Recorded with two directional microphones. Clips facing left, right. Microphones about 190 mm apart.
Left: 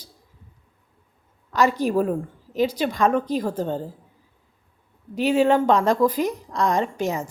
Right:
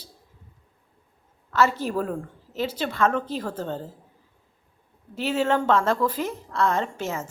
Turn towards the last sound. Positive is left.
turn(degrees=15)  # may be behind; listen again after turning